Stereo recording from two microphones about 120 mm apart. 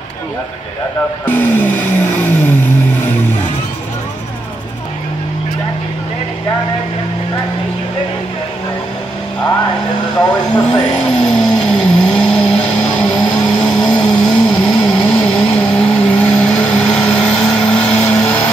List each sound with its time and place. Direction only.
1.2 s vehicle: 15° left (ahead or behind)
10.1 s speech: 35° left (ahead or behind)
10.7 s vehicle: 5° left (ahead or behind)